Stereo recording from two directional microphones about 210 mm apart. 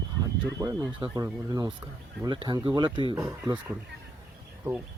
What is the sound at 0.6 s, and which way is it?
Speech, 15° right (ahead or behind).